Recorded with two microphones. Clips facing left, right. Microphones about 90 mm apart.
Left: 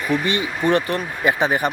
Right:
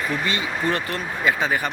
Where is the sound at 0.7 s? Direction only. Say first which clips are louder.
Left 8 dB; 20° left (ahead or behind).